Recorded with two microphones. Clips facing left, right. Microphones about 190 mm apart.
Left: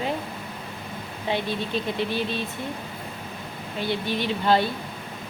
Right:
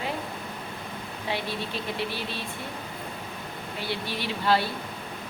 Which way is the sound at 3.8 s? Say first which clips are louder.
Left 6 dB; 20° left (ahead or behind).